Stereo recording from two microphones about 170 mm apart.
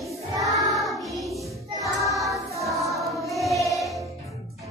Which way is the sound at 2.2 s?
20° right (ahead or behind).